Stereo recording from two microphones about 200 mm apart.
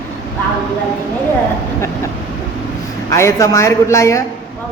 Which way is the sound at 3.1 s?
15° left (ahead or behind).